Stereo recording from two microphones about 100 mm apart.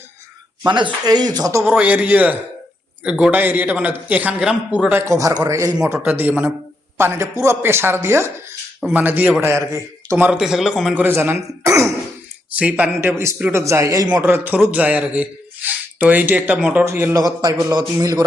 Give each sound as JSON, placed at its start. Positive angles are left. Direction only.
{"t": 1.0, "sound": "a man's voice", "side_deg": -40}
{"t": 1.6, "sound": "a man's voice", "side_deg": -15}
{"t": 3.3, "sound": "a man's voice", "side_deg": -20}
{"t": 4.9, "sound": "a man's voice", "side_deg": -30}
{"t": 5.9, "sound": "a man's voice", "side_deg": -20}
{"t": 10.2, "sound": "speech", "side_deg": -5}
{"t": 10.9, "sound": "a man's voice", "side_deg": -20}
{"t": 16.8, "sound": "speech", "side_deg": -25}
{"t": 17.2, "sound": "a man's voice", "side_deg": -40}